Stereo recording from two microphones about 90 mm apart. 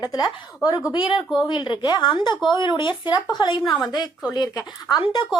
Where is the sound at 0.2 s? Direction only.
35° left (ahead or behind).